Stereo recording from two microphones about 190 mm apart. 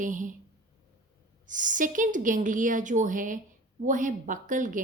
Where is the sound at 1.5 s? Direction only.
45° right (ahead or behind).